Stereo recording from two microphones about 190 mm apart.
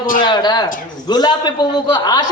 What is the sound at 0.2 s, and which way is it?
A man's voice, 25° left (ahead or behind).